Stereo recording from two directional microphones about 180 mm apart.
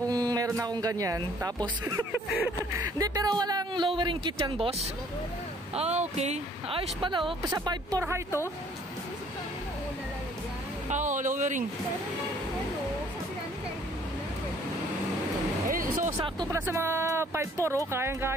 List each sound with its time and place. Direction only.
0.1 s speech: 20° right (ahead or behind)
2.3 s a sound: 10° right (ahead or behind)
3.0 s speech: 20° right (ahead or behind)
10.9 s speech: 45° right (ahead or behind)
15.7 s music: 50° right (ahead or behind)
16.1 s speech: 15° right (ahead or behind)